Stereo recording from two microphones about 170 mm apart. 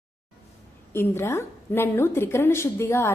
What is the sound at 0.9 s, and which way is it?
A woman's voice, 15° left (ahead or behind).